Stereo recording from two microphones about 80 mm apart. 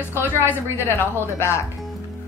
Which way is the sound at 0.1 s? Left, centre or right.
Left.